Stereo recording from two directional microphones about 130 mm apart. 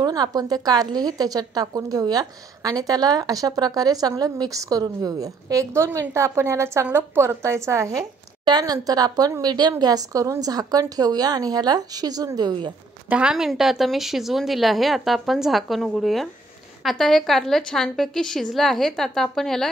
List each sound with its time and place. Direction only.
0.0 s a woman's voice: 30° right (ahead or behind)
13.1 s a woman's voice: 5° right (ahead or behind)